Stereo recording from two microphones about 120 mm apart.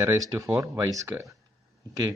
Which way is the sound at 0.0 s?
30° right (ahead or behind).